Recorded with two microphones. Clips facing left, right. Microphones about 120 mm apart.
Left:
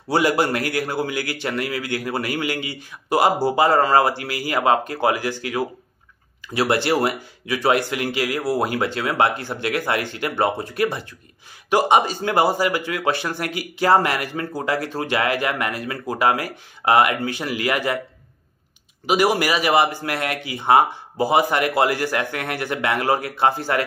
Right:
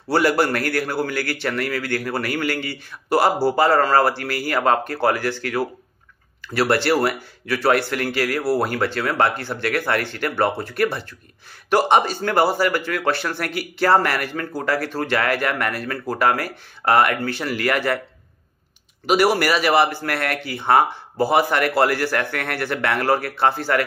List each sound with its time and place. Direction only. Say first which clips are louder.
0.1 s speech: right 1 dB; 20° left (ahead or behind)
6.4 s speech: right 1 dB; 20° left (ahead or behind)
19.0 s speech: right 1 dB; 15° left (ahead or behind)